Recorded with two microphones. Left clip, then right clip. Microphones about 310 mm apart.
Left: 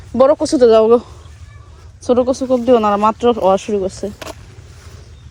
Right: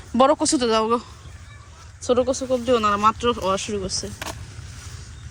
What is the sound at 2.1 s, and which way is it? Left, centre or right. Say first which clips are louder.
Speech: left 7 dB; centre.